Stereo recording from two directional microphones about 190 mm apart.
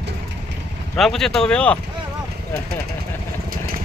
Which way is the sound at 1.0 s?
Centre (ahead or behind).